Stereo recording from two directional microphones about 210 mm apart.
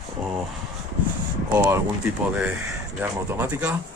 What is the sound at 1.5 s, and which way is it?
Speech, 10° right (ahead or behind).